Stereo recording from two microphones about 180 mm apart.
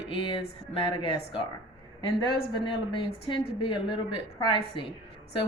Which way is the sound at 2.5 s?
30° left (ahead or behind).